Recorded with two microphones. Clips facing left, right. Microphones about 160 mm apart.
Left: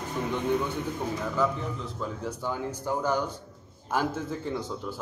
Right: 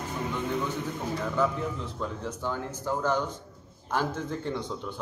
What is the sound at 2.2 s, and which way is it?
A man's voice, 10° left (ahead or behind).